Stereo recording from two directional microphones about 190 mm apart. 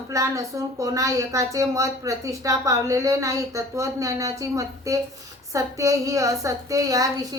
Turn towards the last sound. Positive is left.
turn(degrees=-20)  # may be behind; listen again after turning